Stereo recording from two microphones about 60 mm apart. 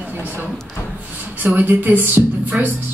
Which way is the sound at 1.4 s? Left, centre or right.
Right.